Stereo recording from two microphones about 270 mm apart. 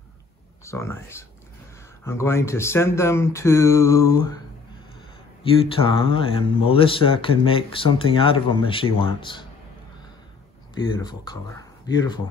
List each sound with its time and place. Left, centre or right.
0.7 s speech: centre
5.8 s speech: centre
10.7 s speech: centre